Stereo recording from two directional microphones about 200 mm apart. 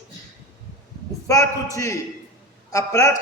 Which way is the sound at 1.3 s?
15° left (ahead or behind).